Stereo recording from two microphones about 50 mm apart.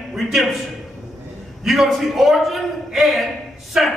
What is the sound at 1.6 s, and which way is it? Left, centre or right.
A man's voice, centre.